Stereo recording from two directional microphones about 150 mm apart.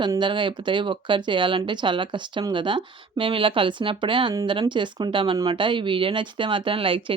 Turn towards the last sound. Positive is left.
turn(degrees=-35)  # may be behind; listen again after turning